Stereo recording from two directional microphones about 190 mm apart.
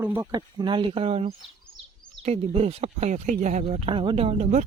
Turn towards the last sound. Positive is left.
turn(degrees=-35)  # may be behind; listen again after turning